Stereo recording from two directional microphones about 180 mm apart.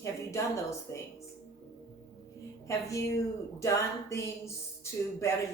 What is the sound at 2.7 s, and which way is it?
Speech, 15° left (ahead or behind).